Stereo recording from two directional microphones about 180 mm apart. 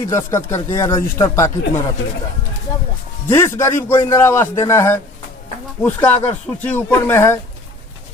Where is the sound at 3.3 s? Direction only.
15° left (ahead or behind).